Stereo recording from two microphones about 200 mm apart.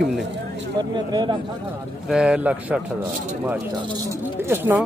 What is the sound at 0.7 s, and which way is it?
Speech, 20° right (ahead or behind).